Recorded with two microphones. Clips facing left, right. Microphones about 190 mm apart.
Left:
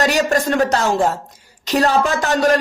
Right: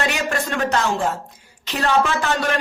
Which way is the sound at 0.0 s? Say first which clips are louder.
Left 6 dB; 40° left (ahead or behind).